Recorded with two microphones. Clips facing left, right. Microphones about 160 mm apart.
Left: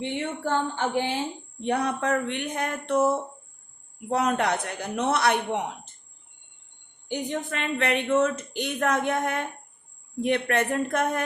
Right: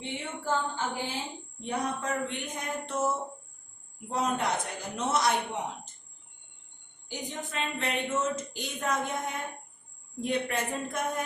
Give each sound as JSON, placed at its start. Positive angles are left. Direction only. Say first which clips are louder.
{"t": 0.0, "sound": "a woman's voice", "louder": "left 7 dB", "side_deg": 70}
{"t": 7.1, "sound": "a woman's voice", "louder": "left 8 dB", "side_deg": 65}